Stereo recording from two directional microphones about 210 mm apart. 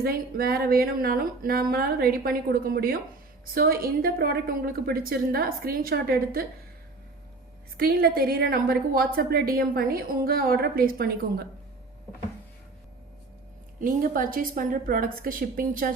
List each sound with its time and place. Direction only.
0.0 s a woman's voice: 45° right (ahead or behind)
7.8 s a woman's voice: 45° right (ahead or behind)
13.7 s a woman's voice: 40° right (ahead or behind)